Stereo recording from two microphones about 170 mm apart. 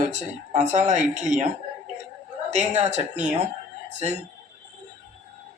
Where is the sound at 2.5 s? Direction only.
45° right (ahead or behind).